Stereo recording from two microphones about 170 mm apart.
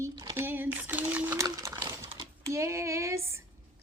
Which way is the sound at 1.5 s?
20° right (ahead or behind).